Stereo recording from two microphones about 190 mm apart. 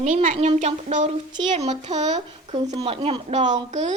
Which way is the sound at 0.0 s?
40° right (ahead or behind).